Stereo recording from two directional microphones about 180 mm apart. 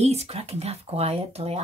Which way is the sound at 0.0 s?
35° right (ahead or behind).